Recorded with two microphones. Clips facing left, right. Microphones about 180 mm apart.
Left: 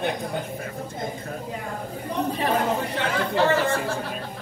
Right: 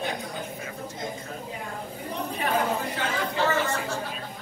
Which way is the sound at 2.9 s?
60° left (ahead or behind).